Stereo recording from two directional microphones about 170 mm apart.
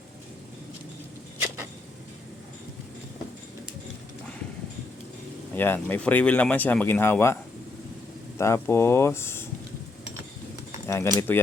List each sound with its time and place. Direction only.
5.5 s speech: 10° left (ahead or behind)
8.4 s speech: 15° left (ahead or behind)
10.8 s speech: 15° left (ahead or behind)